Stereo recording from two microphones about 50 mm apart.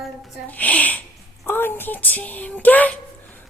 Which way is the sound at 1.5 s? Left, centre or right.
Left.